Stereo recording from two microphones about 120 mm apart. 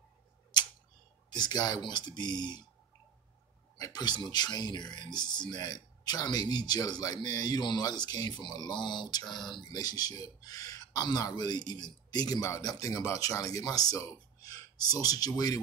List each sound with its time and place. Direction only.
1.3 s speech: 35° left (ahead or behind)
3.7 s speech: 35° left (ahead or behind)